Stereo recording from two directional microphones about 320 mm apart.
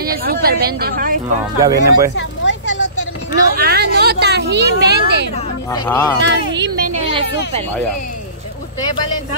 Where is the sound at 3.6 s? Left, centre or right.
Right.